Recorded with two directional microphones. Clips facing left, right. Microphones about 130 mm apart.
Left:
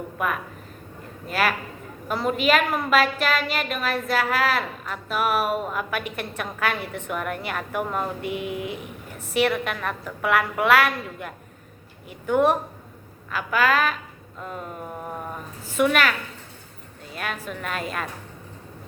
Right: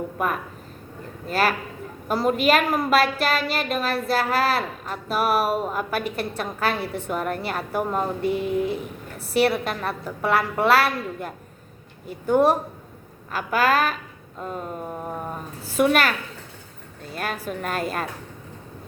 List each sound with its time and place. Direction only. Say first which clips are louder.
0.2 s a woman's voice: even; 35° right (ahead or behind)
15.8 s a woman's voice: right 1 dB; 40° right (ahead or behind)
17.2 s a woman's voice: right 3 dB; 40° right (ahead or behind)